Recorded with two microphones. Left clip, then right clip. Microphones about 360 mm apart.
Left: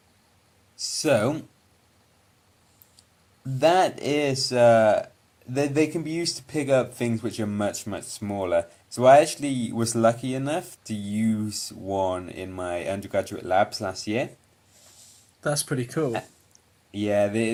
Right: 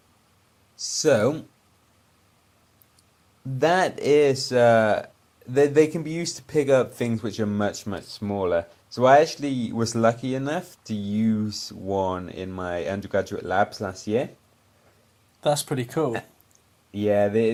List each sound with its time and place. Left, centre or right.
0.9 s speech: centre
3.6 s speech: centre
15.5 s speech: centre